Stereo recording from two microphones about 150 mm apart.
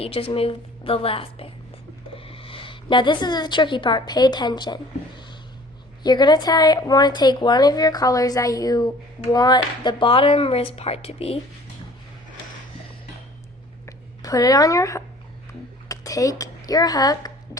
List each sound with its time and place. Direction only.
0.0 s a woman's voice: 40° left (ahead or behind)
13.8 s speech: 25° left (ahead or behind)